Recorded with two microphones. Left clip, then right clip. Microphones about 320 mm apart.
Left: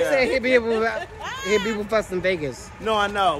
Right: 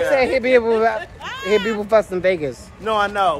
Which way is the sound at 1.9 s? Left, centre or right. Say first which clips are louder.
Right 7 dB; centre.